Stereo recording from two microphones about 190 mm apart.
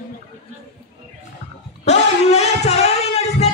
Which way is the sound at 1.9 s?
35° left (ahead or behind).